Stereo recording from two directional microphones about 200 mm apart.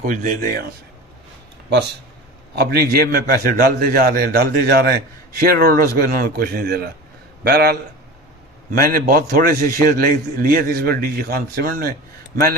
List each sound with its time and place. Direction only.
0.0 s a man's voice: 40° right (ahead or behind)
2.5 s a man's voice: 50° right (ahead or behind)
8.7 s a man's voice: 50° right (ahead or behind)